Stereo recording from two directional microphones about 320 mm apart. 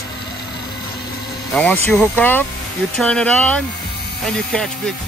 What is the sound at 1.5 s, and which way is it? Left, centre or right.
Speech, centre.